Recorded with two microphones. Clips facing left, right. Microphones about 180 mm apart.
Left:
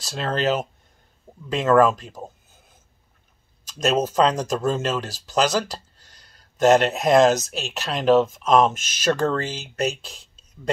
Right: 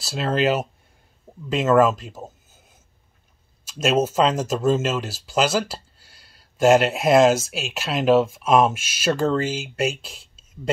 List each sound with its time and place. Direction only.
0.0 s speech: 5° right (ahead or behind)
3.6 s speech: 5° right (ahead or behind)